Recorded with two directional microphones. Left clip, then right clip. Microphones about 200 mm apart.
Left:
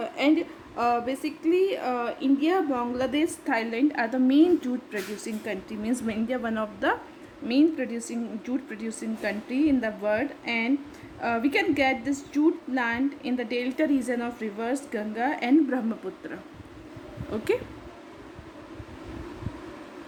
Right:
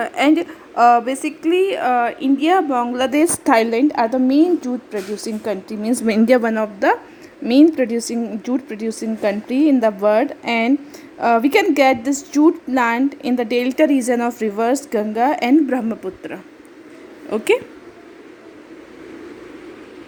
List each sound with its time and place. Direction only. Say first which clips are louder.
0.8 s a woman's voice: right 12 dB; 20° right (ahead or behind)
6.1 s a woman's voice: right 19 dB; 40° right (ahead or behind)
6.5 s a woman's voice: right 10 dB; 20° right (ahead or behind)
7.4 s a woman's voice: right 10 dB; 35° right (ahead or behind)